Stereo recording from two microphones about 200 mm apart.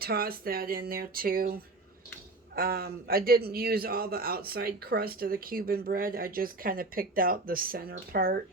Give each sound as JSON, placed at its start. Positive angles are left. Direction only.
{"t": 0.0, "sound": "a man's voice", "side_deg": -50}
{"t": 2.6, "sound": "a man's voice", "side_deg": -50}